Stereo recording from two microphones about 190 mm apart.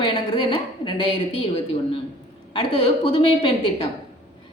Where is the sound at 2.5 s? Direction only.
25° left (ahead or behind).